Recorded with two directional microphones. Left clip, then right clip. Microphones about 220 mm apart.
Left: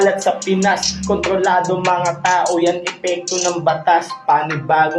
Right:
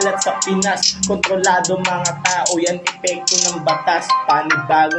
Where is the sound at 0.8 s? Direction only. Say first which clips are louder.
Right 1 dB; 40° right (ahead or behind).